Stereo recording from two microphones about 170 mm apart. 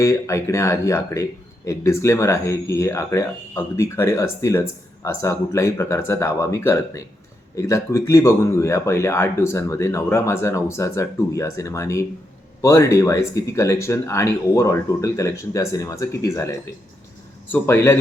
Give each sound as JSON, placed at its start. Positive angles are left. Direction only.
{"t": 0.0, "sound": "speech", "side_deg": 15}